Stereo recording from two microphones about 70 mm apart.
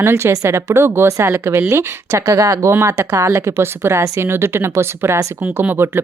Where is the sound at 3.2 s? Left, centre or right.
Right.